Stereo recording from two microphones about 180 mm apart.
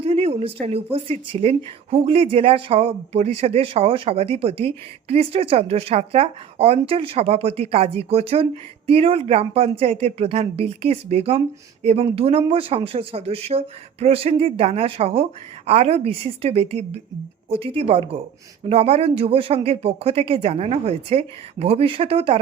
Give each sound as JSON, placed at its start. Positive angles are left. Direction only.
{"t": 0.0, "sound": "speech", "side_deg": -35}